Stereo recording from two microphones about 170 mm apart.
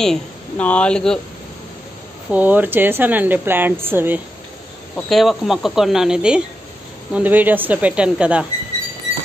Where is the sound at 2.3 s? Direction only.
10° right (ahead or behind).